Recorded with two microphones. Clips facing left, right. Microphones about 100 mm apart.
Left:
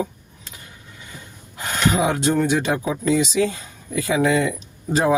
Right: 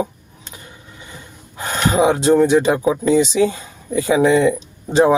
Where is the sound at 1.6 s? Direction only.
30° right (ahead or behind).